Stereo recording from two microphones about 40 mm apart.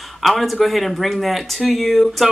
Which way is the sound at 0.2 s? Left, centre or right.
Centre.